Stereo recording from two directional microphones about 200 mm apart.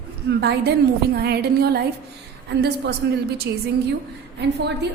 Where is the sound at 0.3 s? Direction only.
55° right (ahead or behind).